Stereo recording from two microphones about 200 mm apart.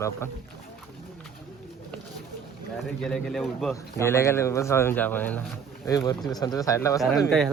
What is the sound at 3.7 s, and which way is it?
Speech, 15° left (ahead or behind).